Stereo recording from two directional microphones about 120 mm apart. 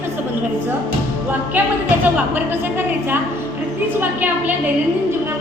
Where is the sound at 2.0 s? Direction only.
15° right (ahead or behind).